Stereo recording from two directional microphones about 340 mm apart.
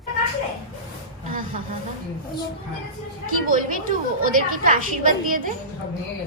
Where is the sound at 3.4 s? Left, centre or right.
Right.